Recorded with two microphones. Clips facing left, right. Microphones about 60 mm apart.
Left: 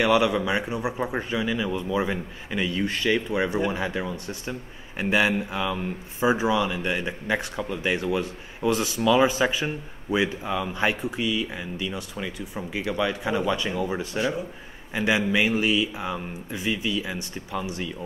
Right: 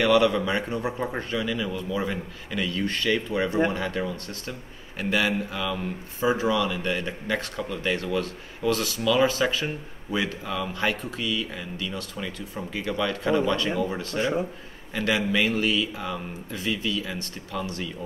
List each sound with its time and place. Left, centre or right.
0.0 s speech: centre